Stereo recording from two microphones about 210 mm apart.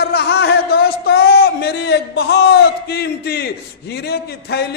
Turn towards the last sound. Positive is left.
turn(degrees=50)  # may be behind; listen again after turning